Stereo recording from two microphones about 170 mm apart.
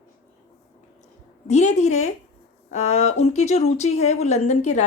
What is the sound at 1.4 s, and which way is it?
Speech, 40° left (ahead or behind).